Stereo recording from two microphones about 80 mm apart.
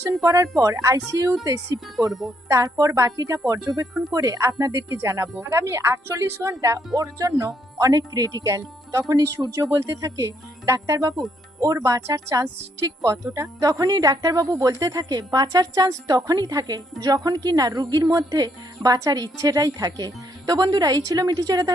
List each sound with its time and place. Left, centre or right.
0.2 s speech: right
2.0 s speech: centre
2.5 s speech: right
4.1 s a woman's voice: right